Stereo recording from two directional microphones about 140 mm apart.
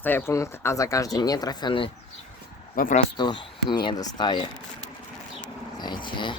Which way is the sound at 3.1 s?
35° left (ahead or behind).